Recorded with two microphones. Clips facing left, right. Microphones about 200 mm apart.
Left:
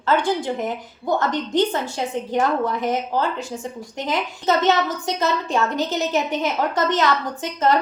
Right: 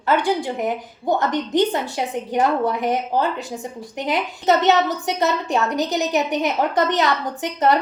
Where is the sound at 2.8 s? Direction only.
15° right (ahead or behind).